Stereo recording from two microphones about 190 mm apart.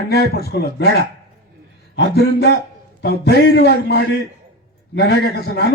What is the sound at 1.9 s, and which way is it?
Speech, 60° left (ahead or behind).